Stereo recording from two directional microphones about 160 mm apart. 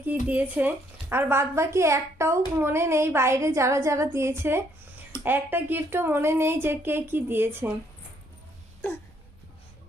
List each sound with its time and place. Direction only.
0.0 s speech: 10° right (ahead or behind)